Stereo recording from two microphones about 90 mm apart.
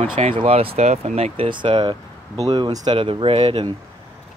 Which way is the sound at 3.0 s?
80° right.